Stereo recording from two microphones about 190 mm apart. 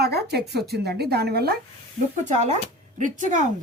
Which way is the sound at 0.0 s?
60° right (ahead or behind).